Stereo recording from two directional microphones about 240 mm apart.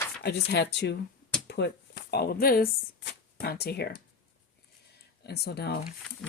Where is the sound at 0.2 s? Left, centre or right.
Left.